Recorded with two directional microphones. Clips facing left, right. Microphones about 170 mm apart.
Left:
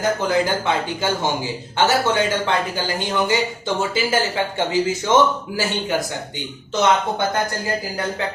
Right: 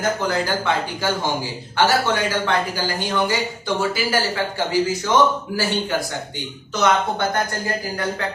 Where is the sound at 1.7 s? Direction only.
20° left (ahead or behind).